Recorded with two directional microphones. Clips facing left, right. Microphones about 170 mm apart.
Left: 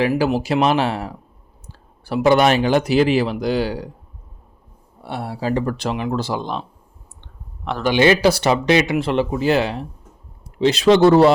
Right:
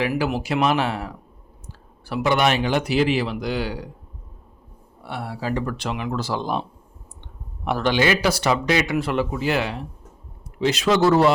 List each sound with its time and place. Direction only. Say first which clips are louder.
0.0 s a man's voice: left 5 dB; 35° left (ahead or behind)
5.0 s a man's voice: left 4 dB; 30° left (ahead or behind)
7.9 s speech: left 9 dB; 25° left (ahead or behind)